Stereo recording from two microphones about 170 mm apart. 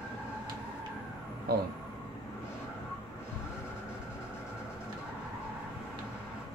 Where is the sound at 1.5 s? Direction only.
65° right (ahead or behind).